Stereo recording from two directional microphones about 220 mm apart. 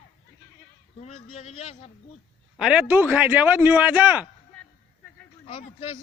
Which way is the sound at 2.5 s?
5° right (ahead or behind).